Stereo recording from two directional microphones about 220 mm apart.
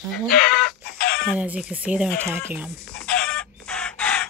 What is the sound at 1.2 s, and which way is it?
Speech, 5° right (ahead or behind).